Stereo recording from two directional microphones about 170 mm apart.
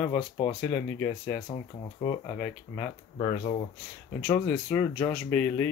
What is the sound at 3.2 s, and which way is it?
Speech, 35° left (ahead or behind).